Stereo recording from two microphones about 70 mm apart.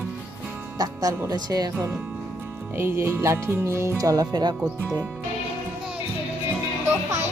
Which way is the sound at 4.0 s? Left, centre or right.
Right.